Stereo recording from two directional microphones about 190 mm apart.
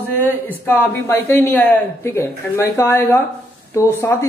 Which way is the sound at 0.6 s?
10° left (ahead or behind).